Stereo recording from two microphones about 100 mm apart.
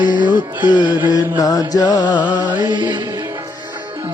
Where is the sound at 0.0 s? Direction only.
50° left (ahead or behind).